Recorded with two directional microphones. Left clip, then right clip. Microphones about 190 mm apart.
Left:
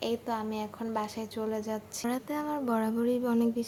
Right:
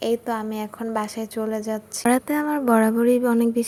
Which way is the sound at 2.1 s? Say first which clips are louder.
Right 12 dB; 40° right (ahead or behind).